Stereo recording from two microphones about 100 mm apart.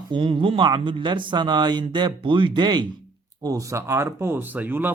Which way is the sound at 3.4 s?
35° right (ahead or behind).